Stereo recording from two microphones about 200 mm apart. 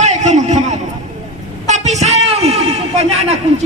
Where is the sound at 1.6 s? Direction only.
35° right (ahead or behind).